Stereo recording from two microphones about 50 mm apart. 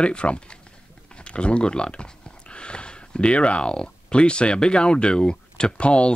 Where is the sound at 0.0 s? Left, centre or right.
Left.